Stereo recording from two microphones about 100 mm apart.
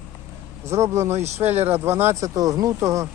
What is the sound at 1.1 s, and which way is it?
Speech, 90° right.